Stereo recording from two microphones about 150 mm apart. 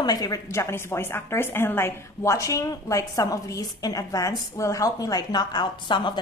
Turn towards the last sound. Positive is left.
turn(degrees=30)  # may be behind; listen again after turning